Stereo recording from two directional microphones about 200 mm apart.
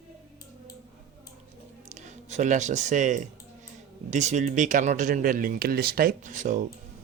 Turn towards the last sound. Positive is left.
turn(degrees=-40)  # may be behind; listen again after turning